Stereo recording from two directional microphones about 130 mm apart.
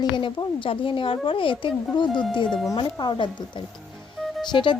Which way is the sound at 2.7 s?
35° left (ahead or behind).